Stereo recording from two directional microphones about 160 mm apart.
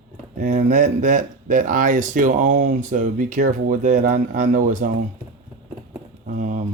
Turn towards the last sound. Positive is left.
turn(degrees=-55)  # may be behind; listen again after turning